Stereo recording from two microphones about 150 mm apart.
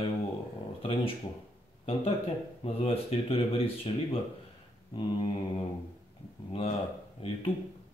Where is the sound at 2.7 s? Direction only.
40° left (ahead or behind).